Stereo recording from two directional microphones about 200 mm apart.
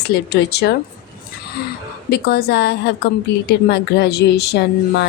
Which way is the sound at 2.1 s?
50° left (ahead or behind).